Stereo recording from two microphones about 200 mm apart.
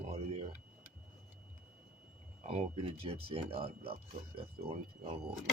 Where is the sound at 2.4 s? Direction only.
30° right (ahead or behind).